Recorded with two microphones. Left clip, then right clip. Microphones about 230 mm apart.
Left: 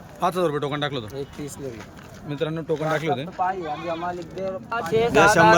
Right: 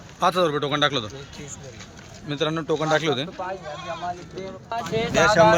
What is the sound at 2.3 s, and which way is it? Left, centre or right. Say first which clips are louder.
Speech: right 2 dB; centre.